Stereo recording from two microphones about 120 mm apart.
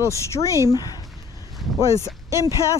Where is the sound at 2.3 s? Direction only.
25° right (ahead or behind).